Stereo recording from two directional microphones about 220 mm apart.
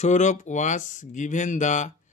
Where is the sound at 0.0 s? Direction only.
35° left (ahead or behind).